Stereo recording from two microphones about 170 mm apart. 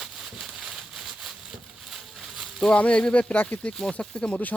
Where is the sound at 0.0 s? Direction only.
Centre (ahead or behind).